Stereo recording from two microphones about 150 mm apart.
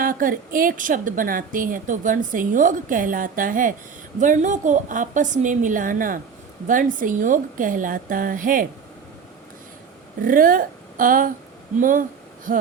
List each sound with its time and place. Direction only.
0.0 s a woman's voice: 70° right (ahead or behind)
10.2 s a woman's voice: 65° right (ahead or behind)